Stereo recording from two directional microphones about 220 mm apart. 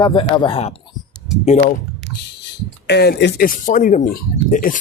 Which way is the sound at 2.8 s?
50° left (ahead or behind).